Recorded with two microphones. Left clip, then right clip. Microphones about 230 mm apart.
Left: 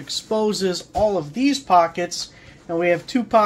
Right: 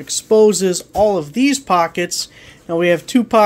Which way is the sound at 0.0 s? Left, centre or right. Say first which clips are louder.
Right 10 dB; right.